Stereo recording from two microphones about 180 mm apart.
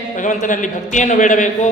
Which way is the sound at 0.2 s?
45° left (ahead or behind).